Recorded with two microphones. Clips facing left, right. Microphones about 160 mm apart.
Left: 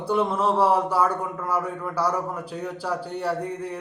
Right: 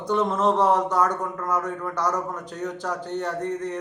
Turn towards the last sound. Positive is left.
turn(degrees=10)  # may be behind; listen again after turning